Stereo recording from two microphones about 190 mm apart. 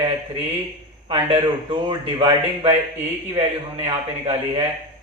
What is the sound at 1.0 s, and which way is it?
A man's voice, 30° right (ahead or behind).